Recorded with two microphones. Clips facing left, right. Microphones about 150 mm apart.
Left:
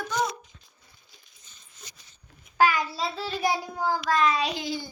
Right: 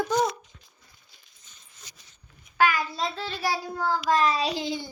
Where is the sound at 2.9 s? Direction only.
5° left (ahead or behind).